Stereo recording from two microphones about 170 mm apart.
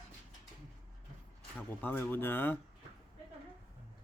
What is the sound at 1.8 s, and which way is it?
Speech, 10° left (ahead or behind).